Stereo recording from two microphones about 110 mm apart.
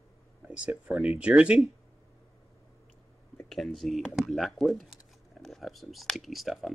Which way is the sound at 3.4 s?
Centre (ahead or behind).